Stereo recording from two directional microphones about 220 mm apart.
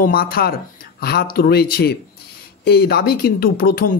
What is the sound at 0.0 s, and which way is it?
Speech, 40° left (ahead or behind).